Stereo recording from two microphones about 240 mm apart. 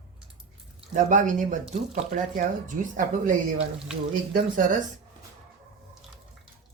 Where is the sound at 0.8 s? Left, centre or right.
Right.